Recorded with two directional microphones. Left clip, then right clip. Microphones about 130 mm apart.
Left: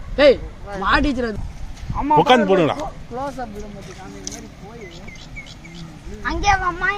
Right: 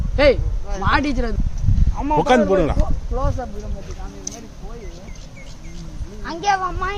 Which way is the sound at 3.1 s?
30° left (ahead or behind).